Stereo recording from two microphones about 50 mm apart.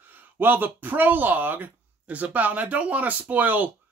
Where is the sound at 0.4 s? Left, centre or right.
Right.